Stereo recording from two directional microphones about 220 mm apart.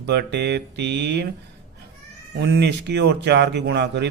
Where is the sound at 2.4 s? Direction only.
50° right (ahead or behind).